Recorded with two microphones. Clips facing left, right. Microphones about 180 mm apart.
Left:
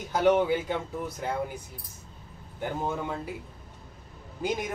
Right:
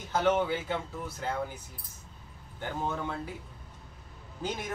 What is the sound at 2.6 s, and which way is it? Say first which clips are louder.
Speech: left 3 dB; 10° left (ahead or behind).